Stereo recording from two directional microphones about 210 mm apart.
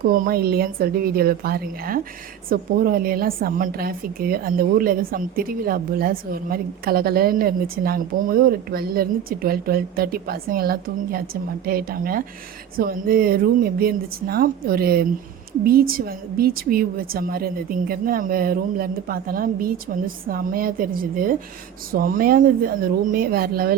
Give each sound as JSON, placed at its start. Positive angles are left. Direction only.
{"t": 0.0, "sound": "a woman's voice", "side_deg": -45}